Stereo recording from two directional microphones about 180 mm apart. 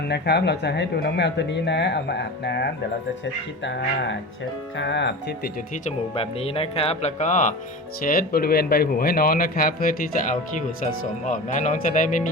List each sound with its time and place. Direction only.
0.1 s speech: 65° left (ahead or behind)
3.6 s speech: 90° left
4.8 s speech: 80° left
6.1 s speech: 35° left (ahead or behind)
8.0 s a man's voice: 55° left (ahead or behind)
11.0 s a man's voice: 45° left (ahead or behind)